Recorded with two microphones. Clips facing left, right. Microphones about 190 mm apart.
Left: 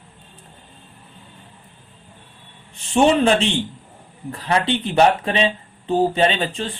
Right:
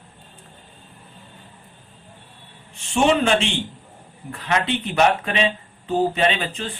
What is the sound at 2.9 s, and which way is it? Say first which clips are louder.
Speech: left 3 dB; 35° left (ahead or behind).